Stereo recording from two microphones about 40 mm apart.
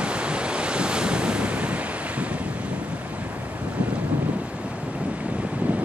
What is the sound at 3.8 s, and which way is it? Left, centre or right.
Boat, right.